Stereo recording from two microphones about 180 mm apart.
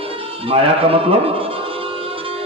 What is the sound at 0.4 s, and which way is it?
A man's voice, 30° right (ahead or behind).